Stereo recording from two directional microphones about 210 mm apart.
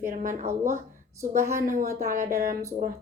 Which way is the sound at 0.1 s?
40° right (ahead or behind).